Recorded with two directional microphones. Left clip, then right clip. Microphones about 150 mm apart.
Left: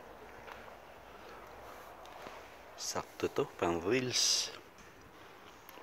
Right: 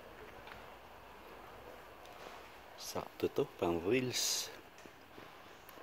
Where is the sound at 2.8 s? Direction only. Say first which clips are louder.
Left 4 dB; 15° right (ahead or behind).